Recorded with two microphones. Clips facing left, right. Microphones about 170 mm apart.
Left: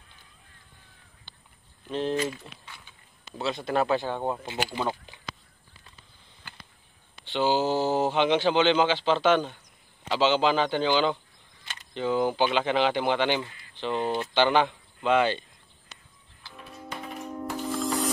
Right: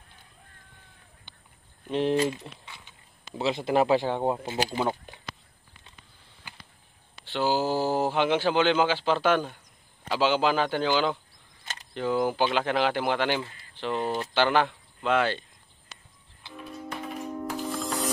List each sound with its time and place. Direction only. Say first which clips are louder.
1.3 s a sound: left 1 dB; 20° right (ahead or behind)
1.9 s speech: right 3 dB; 25° right (ahead or behind)
4.6 s speech: right 1 dB; 15° right (ahead or behind)
7.2 s speech: left 1 dB; 5° right (ahead or behind)
16.5 s music: right 3 dB; centre (ahead or behind)